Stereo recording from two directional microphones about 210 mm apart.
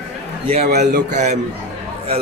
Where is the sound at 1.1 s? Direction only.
35° right (ahead or behind).